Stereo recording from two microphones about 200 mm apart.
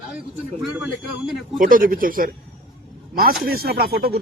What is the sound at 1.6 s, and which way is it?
Speech, 45° right (ahead or behind).